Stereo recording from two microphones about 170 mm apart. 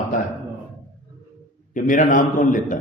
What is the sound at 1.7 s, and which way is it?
A man's voice, 50° left (ahead or behind).